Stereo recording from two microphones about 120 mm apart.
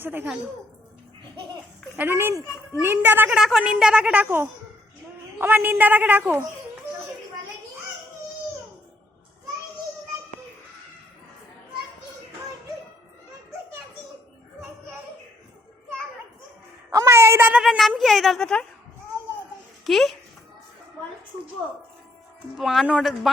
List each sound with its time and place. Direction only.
0.0 s a woman's voice: 15° right (ahead or behind)
2.0 s a child's voice: 20° right (ahead or behind)
3.3 s a woman's voice: 5° right (ahead or behind)
16.9 s a sound: 25° right (ahead or behind)
17.5 s speech: 5° right (ahead or behind)
19.8 s a child's voice: centre (ahead or behind)
22.5 s speech: 5° right (ahead or behind)